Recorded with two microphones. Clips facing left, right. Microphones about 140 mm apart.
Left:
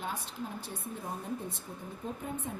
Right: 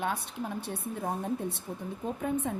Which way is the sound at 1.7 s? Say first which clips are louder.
Right 6 dB; 75° right (ahead or behind).